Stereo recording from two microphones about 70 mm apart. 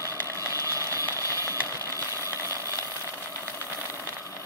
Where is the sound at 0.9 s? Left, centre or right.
Right.